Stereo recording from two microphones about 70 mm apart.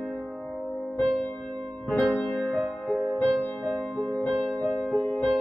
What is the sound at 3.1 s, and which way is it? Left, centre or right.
Music, left.